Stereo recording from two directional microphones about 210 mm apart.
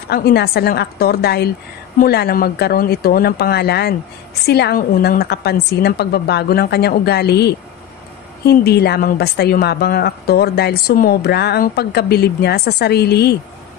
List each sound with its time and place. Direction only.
0.1 s speech: 50° left (ahead or behind)